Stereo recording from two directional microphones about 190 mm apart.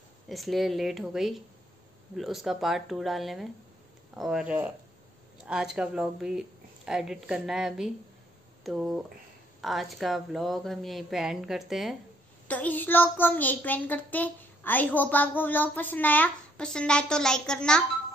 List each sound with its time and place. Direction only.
0.3 s a woman's voice: centre (ahead or behind)